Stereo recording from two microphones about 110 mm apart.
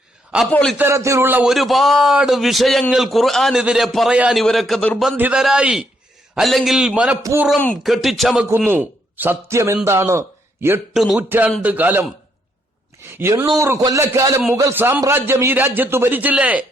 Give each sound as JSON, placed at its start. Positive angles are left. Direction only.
{"t": 0.8, "sound": "a man's voice", "side_deg": -25}
{"t": 1.5, "sound": "a man's voice", "side_deg": 0}
{"t": 5.1, "sound": "a man's voice", "side_deg": -15}
{"t": 8.4, "sound": "a man's voice", "side_deg": -20}
{"t": 10.9, "sound": "a man's voice", "side_deg": 0}
{"t": 11.2, "sound": "a man's voice", "side_deg": -15}